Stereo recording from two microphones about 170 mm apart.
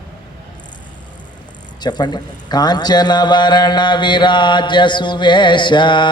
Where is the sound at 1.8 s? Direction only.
25° left (ahead or behind).